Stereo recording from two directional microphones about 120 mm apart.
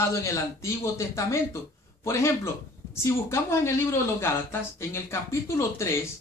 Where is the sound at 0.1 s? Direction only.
25° left (ahead or behind).